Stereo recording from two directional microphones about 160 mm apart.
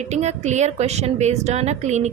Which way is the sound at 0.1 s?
45° right (ahead or behind).